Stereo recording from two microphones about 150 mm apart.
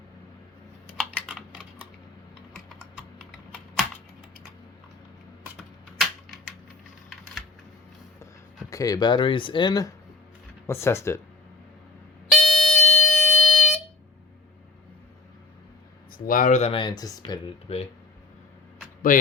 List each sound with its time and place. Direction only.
1.3 s typing: 10° right (ahead or behind)
5.5 s typing: centre (ahead or behind)
8.7 s speech: 25° left (ahead or behind)
10.7 s speech: 15° left (ahead or behind)
12.3 s music: centre (ahead or behind)
16.1 s speech: 70° left (ahead or behind); by 16.7 s 50° left (ahead or behind)
16.7 s speech: 30° left (ahead or behind)
19.1 s speech: 65° left (ahead or behind)